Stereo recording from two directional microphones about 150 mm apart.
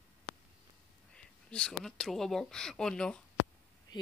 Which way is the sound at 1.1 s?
5° left (ahead or behind).